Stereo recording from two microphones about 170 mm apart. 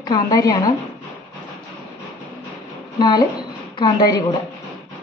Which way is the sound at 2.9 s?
25° left (ahead or behind).